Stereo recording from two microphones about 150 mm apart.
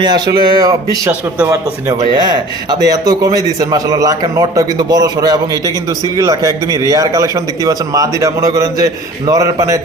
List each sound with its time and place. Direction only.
0.0 s a man's voice: 30° right (ahead or behind)
2.1 s a man's voice: 30° right (ahead or behind)